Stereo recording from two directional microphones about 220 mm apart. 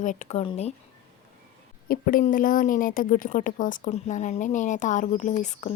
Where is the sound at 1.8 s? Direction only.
40° left (ahead or behind).